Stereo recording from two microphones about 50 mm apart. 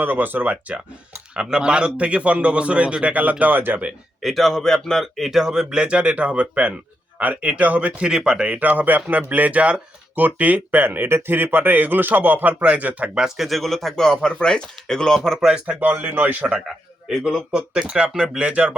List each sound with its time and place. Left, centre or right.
0.0 s speech: right
1.3 s a man's voice: centre; by 3.8 s right
4.2 s a man's voice: centre; by 8.0 s right
8.0 s speech: centre
8.5 s speech: right
13.1 s speech: centre
15.4 s speech: centre
15.6 s speech: right
16.6 s a man's voice: centre